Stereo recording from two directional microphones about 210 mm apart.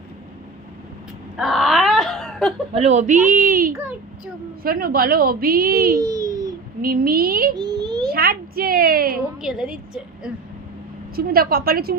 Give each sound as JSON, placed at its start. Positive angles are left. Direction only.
{"t": 1.4, "sound": "wail", "side_deg": 0}
{"t": 2.7, "sound": "a woman's voice", "side_deg": -30}
{"t": 6.0, "sound": "a sound", "side_deg": -15}
{"t": 6.8, "sound": "a woman's voice", "side_deg": -45}
{"t": 7.5, "sound": "a sound", "side_deg": -20}
{"t": 8.0, "sound": "a woman's voice", "side_deg": -45}
{"t": 9.4, "sound": "a woman's voice", "side_deg": -5}
{"t": 11.1, "sound": "a woman's voice", "side_deg": -45}